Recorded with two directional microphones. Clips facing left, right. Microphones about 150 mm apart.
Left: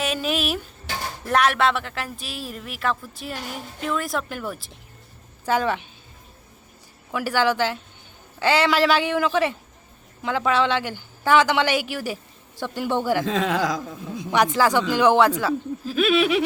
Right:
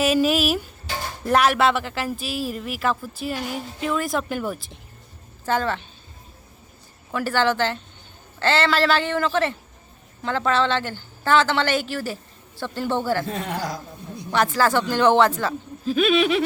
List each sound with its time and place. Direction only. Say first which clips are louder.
0.0 s speech: right 6 dB; 5° right (ahead or behind)
5.5 s a woman's voice: left 1 dB; 10° left (ahead or behind)
7.1 s a woman's voice: even; 10° left (ahead or behind)
13.2 s speech: left 5 dB; 90° left
14.5 s a woman's voice: left 1 dB; 15° left (ahead or behind)